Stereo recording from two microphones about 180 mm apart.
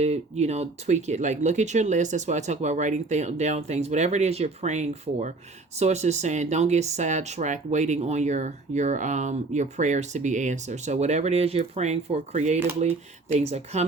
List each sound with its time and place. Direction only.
0.0 s speech: 40° right (ahead or behind)